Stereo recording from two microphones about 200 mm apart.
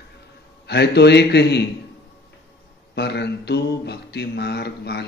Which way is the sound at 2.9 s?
55° left (ahead or behind).